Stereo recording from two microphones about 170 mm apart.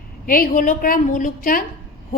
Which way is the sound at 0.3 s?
55° left (ahead or behind).